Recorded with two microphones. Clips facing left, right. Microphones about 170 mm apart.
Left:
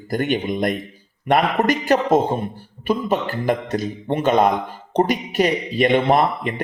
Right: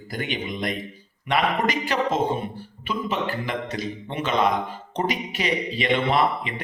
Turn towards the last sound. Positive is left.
turn(degrees=45)  # may be behind; listen again after turning